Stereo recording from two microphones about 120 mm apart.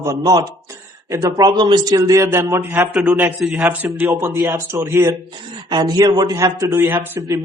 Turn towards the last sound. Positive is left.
turn(degrees=-25)  # may be behind; listen again after turning